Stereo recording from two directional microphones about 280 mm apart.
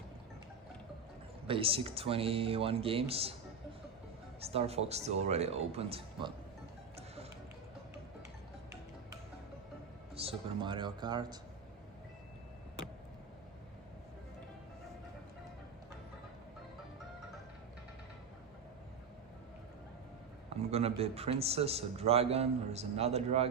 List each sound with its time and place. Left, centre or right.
1.5 s a man's voice: centre
4.4 s a man's voice: right
10.2 s speech: centre
20.5 s a man's voice: right